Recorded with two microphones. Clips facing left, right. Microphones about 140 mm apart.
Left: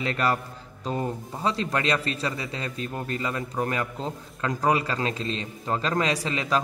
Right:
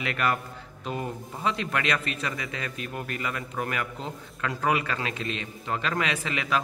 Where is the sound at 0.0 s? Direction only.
30° left (ahead or behind).